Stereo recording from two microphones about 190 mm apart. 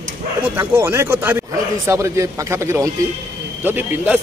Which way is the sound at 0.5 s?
10° right (ahead or behind).